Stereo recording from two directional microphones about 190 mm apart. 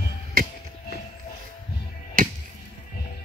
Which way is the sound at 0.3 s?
50° right (ahead or behind).